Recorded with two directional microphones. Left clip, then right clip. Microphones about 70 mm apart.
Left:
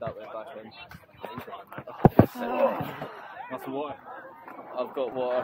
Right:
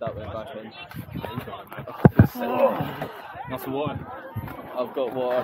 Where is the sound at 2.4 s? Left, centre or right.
Left.